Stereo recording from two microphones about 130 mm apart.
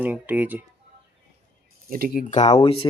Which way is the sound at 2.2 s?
65° left (ahead or behind).